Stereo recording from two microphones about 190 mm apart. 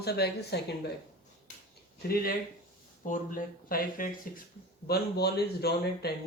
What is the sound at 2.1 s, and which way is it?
Speech, 55° left (ahead or behind).